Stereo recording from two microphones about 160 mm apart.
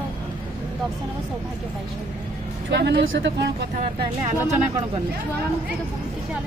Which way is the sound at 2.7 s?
90° right.